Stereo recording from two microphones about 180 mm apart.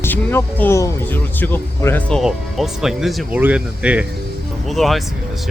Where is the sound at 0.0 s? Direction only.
10° left (ahead or behind).